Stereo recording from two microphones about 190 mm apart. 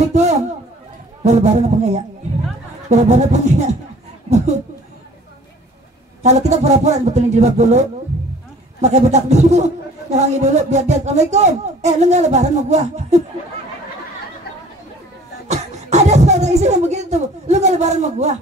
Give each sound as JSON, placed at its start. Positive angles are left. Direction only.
{"t": 0.0, "sound": "a sound", "side_deg": -35}
{"t": 1.2, "sound": "a man's voice", "side_deg": -35}
{"t": 6.2, "sound": "a man's voice", "side_deg": -35}
{"t": 8.8, "sound": "a man's voice", "side_deg": -35}
{"t": 15.4, "sound": "speech", "side_deg": -35}